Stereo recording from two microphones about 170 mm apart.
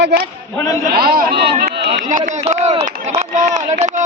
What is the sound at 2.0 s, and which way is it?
Speech, 45° right (ahead or behind).